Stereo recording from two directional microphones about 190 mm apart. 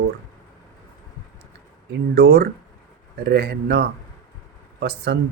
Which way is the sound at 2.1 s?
55° right (ahead or behind).